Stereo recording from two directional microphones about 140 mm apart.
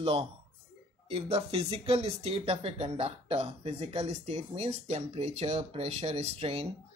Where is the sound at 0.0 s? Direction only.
40° right (ahead or behind).